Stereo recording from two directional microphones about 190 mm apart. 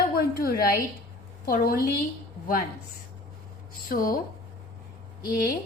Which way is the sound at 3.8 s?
50° left (ahead or behind).